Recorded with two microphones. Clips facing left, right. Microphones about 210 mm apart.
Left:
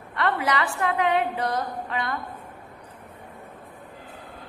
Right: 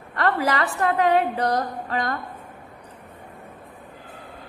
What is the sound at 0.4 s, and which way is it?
A woman's voice, 40° right (ahead or behind).